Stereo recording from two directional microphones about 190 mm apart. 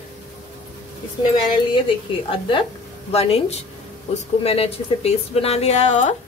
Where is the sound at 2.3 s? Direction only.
25° left (ahead or behind).